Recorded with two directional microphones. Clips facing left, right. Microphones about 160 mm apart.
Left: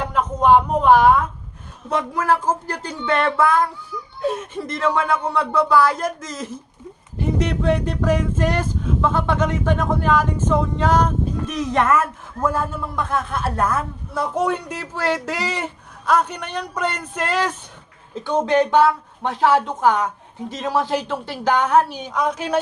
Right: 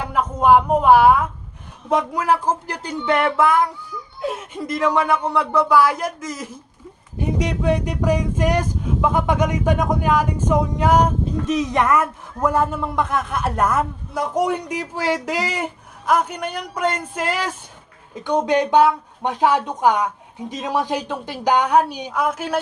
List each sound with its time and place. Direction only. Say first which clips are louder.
0.1 s speech: right 1 dB; 10° right (ahead or behind)